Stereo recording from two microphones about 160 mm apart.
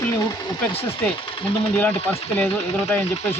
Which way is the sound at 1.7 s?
15° left (ahead or behind).